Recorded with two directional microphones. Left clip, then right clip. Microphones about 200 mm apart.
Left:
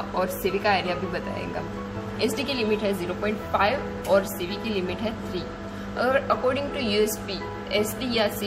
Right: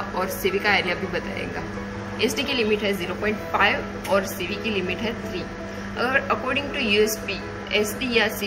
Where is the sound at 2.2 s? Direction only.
90° left.